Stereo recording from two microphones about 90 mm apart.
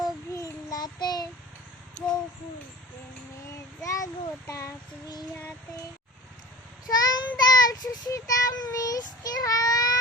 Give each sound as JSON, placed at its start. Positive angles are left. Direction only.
{"t": 0.0, "sound": "child singing", "side_deg": 40}
{"t": 3.8, "sound": "a sound", "side_deg": 35}
{"t": 6.8, "sound": "child singing", "side_deg": 45}